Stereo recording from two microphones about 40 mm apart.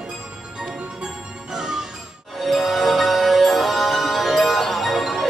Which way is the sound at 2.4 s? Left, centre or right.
Centre.